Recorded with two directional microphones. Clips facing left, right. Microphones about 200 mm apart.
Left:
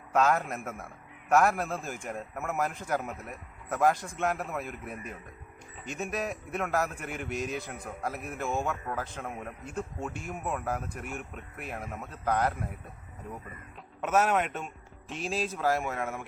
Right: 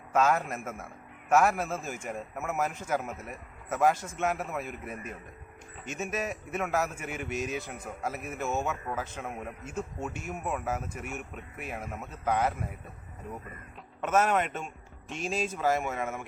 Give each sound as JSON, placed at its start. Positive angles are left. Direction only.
{"t": 0.1, "sound": "a man's voice", "side_deg": 0}
{"t": 14.0, "sound": "a man's voice", "side_deg": 5}